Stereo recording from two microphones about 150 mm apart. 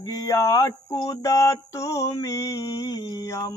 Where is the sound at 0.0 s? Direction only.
25° left (ahead or behind).